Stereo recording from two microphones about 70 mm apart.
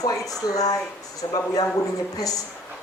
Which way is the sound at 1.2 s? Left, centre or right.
Left.